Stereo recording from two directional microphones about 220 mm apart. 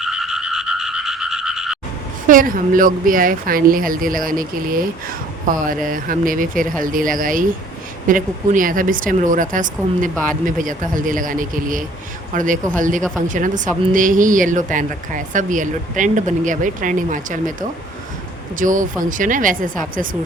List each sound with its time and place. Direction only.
0.0 s frog: 5° right (ahead or behind)
2.2 s speech: 40° right (ahead or behind)
18.6 s speech: 35° right (ahead or behind)